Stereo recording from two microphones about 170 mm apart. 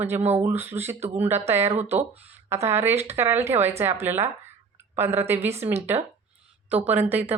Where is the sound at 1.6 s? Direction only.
40° right (ahead or behind).